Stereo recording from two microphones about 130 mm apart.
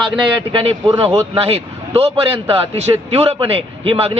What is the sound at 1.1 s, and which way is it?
A man's voice, 50° right (ahead or behind).